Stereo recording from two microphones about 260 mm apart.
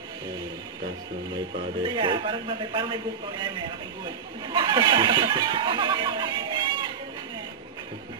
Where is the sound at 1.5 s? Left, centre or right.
Centre.